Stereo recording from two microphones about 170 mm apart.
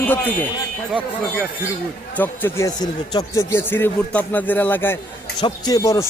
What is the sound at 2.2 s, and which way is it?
A man's voice, 15° left (ahead or behind).